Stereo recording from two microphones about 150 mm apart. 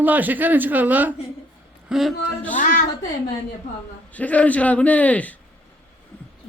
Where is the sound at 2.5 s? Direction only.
60° left (ahead or behind).